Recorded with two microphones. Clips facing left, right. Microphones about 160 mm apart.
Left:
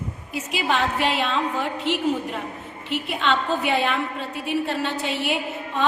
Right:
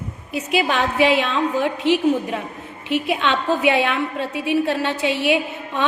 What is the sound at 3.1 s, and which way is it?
Speech, 70° right (ahead or behind).